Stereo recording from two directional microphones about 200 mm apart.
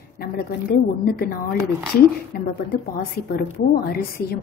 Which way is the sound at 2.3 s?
50° left (ahead or behind).